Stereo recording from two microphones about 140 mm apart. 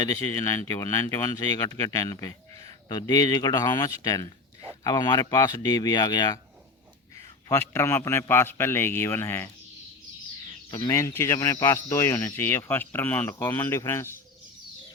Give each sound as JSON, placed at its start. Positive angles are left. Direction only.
{"t": 0.0, "sound": "speech", "side_deg": 25}
{"t": 7.4, "sound": "speech", "side_deg": 20}
{"t": 10.7, "sound": "speech", "side_deg": 25}